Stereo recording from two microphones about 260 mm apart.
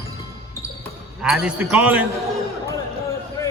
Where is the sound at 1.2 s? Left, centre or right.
Centre.